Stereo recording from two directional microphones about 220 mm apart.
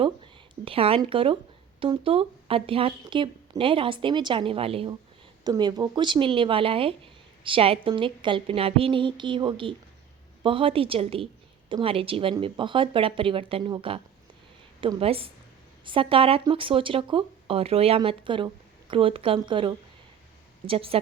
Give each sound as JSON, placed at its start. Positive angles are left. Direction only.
{"t": 0.6, "sound": "speech", "side_deg": -25}